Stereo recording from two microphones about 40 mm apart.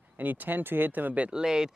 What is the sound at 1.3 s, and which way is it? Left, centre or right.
Speech, centre.